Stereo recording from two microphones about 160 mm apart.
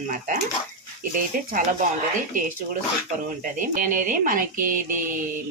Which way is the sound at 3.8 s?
55° right (ahead or behind).